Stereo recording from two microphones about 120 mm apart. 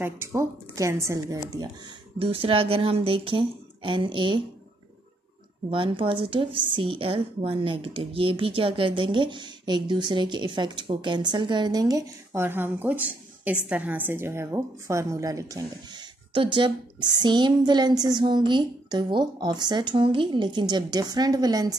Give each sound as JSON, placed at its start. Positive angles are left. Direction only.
{"t": 0.0, "sound": "a woman's voice", "side_deg": -25}
{"t": 2.1, "sound": "speech", "side_deg": -50}
{"t": 5.7, "sound": "speech", "side_deg": -45}
{"t": 12.4, "sound": "a woman's voice", "side_deg": -20}